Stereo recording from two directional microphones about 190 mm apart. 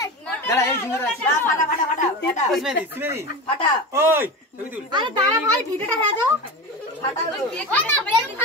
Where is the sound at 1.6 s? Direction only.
40° left (ahead or behind).